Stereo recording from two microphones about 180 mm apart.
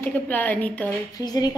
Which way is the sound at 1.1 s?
20° left (ahead or behind).